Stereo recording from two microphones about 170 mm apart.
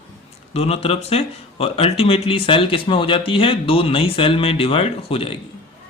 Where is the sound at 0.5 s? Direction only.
35° left (ahead or behind).